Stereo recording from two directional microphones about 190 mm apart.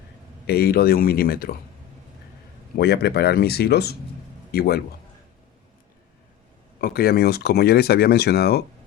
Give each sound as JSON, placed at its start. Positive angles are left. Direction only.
{"t": 0.4, "sound": "speech", "side_deg": 55}
{"t": 2.7, "sound": "speech", "side_deg": 55}
{"t": 6.8, "sound": "speech", "side_deg": 55}